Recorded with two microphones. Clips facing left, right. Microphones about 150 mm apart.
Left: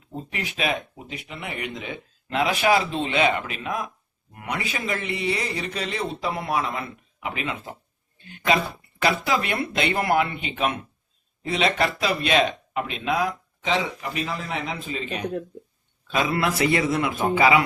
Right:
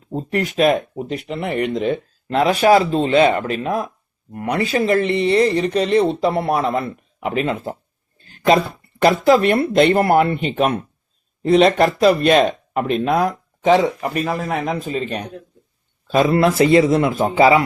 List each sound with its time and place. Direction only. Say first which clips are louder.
0.1 s speech: right 11 dB; 40° right (ahead or behind)
16.5 s speech: right 9 dB; 25° right (ahead or behind)